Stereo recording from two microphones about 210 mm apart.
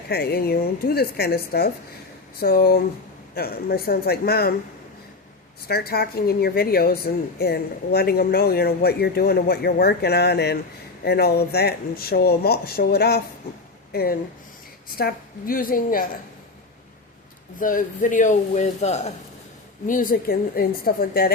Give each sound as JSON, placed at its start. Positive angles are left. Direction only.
{"t": 0.1, "sound": "speech", "side_deg": 50}
{"t": 5.6, "sound": "speech", "side_deg": 50}
{"t": 17.6, "sound": "a man's voice", "side_deg": 40}